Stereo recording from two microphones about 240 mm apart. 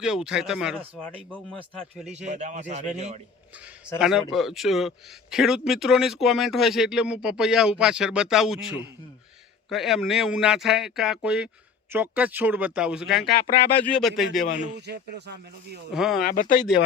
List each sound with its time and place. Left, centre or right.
0.0 s a man's voice: centre
2.1 s a man's voice: right
3.9 s a man's voice: centre
15.9 s a man's voice: centre
16.2 s speech: left